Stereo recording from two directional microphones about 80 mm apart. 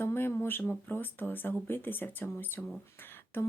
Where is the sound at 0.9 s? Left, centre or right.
Left.